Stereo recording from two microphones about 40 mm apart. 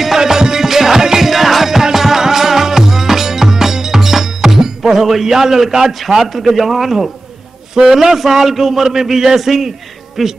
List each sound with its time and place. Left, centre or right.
0.0 s music: centre
7.7 s a man's voice: centre
10.2 s hoot: centre